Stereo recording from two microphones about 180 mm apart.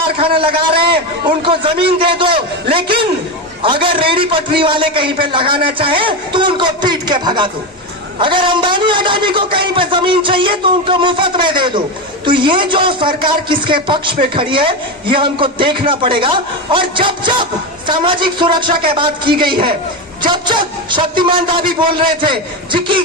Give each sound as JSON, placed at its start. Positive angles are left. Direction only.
{"t": 0.2, "sound": "a man's voice", "side_deg": -30}
{"t": 2.0, "sound": "a sound", "side_deg": -30}
{"t": 3.6, "sound": "a man's voice", "side_deg": -30}